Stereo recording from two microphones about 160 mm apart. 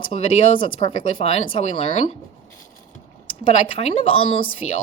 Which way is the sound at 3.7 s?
35° left (ahead or behind).